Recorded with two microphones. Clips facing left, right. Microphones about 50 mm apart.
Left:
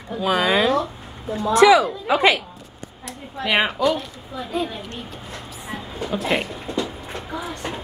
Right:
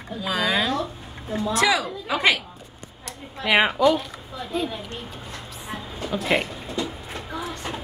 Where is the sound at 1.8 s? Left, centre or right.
Centre.